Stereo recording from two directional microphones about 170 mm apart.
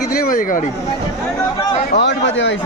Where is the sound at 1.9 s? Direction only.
90° left.